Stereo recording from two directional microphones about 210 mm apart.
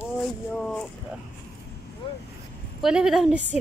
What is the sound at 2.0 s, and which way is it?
Speech, 25° left (ahead or behind).